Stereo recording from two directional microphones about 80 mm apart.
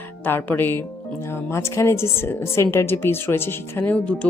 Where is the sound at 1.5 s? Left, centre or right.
Left.